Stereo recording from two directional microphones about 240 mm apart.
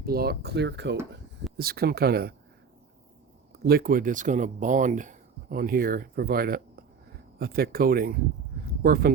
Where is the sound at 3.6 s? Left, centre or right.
Right.